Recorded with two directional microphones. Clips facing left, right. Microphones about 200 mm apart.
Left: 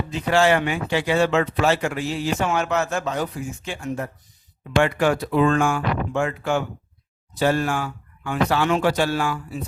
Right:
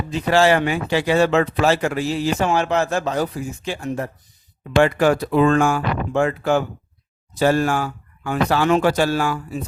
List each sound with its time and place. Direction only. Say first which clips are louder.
0.3 s speech: right 2 dB; 35° right (ahead or behind)